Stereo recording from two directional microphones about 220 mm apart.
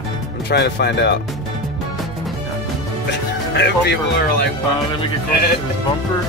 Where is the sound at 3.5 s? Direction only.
50° left (ahead or behind).